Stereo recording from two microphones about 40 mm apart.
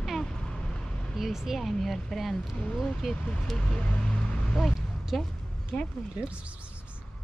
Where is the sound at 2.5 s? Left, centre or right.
Left.